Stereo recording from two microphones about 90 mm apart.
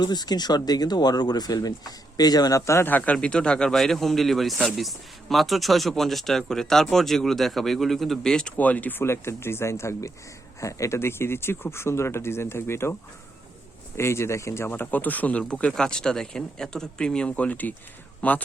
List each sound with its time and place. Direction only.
0.0 s speech: 50° left (ahead or behind); by 2.9 s 30° left (ahead or behind)
2.9 s speech: 15° left (ahead or behind)